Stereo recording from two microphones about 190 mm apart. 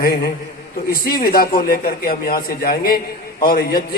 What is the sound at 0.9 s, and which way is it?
A man's voice, 50° left (ahead or behind).